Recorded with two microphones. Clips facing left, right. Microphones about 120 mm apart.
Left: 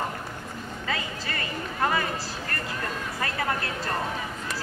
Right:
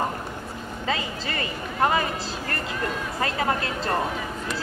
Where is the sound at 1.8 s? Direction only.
25° right (ahead or behind).